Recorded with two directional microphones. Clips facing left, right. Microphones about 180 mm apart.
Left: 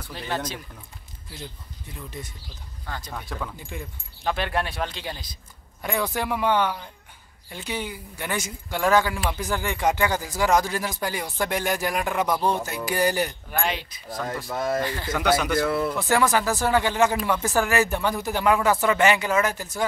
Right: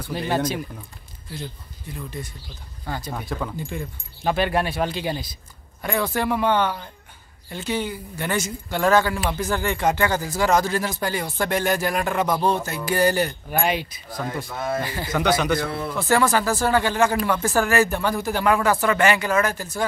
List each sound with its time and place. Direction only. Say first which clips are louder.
0.3 s speech: right 6 dB; 10° right (ahead or behind)
2.9 s speech: right 5 dB; 10° right (ahead or behind)
5.8 s speech: right 3 dB; 15° left (ahead or behind)
13.5 s speech: right 4 dB; 10° right (ahead or behind)
15.1 s speech: right 2 dB; 5° left (ahead or behind)